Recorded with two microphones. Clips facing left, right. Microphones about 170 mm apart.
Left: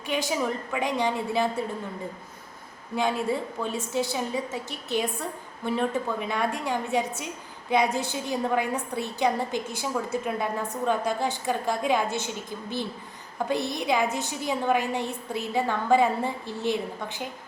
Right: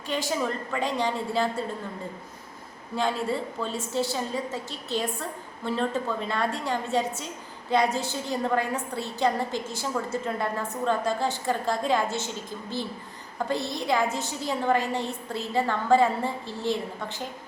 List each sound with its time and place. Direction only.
0.1 s a woman's voice: 15° left (ahead or behind)
2.9 s a woman's voice: 15° left (ahead or behind)
13.5 s a woman's voice: 15° left (ahead or behind)